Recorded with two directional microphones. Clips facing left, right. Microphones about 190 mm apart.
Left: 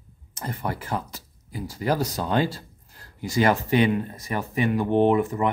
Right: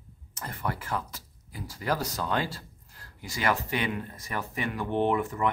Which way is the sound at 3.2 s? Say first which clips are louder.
Left 8 dB; 40° left (ahead or behind).